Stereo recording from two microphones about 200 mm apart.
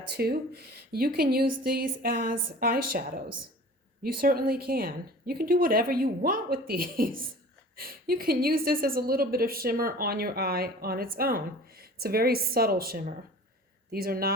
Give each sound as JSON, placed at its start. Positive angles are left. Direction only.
{"t": 0.1, "sound": "a woman's voice", "side_deg": -50}